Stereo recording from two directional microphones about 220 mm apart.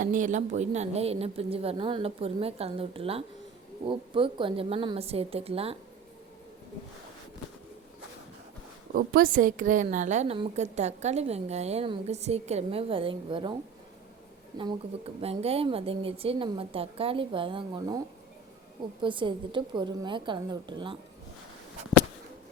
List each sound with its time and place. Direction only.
0.0 s a woman's voice: 35° right (ahead or behind)
8.9 s a woman's voice: 40° right (ahead or behind); by 13.6 s 20° right (ahead or behind)
14.6 s a woman's voice: 25° right (ahead or behind)
19.0 s a woman's voice: 20° right (ahead or behind)